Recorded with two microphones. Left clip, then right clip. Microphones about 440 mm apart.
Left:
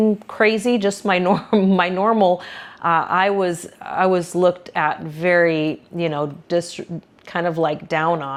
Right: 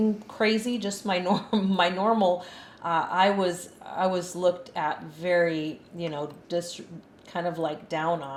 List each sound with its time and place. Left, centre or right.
0.3 s speech: left